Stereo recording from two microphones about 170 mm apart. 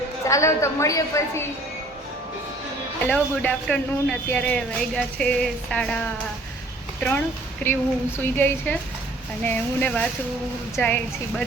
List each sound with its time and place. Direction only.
0.3 s a woman's voice: 15° left (ahead or behind)
3.1 s a woman's voice: 5° left (ahead or behind)